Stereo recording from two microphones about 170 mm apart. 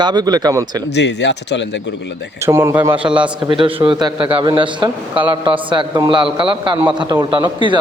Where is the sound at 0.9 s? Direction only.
90° left.